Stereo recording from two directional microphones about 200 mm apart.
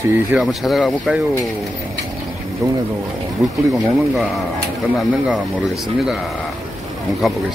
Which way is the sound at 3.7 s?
5° right (ahead or behind).